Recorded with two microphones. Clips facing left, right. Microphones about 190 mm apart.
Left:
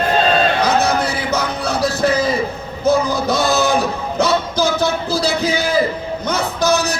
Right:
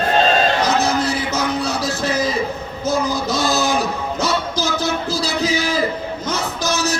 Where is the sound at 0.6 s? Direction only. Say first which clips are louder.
Left 2 dB; 60° left (ahead or behind).